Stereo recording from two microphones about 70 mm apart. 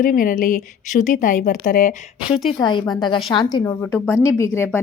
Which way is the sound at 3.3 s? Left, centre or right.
Left.